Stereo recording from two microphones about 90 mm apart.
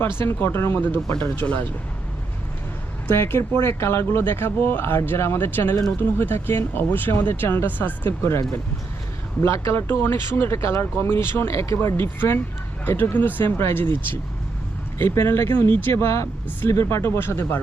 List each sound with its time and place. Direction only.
0.2 s speech: 25° left (ahead or behind)
3.1 s speech: 25° left (ahead or behind)